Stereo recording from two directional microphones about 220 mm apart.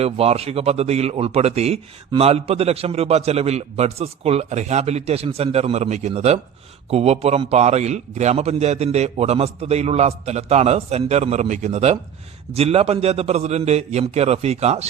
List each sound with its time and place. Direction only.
0.0 s speech: 30° right (ahead or behind)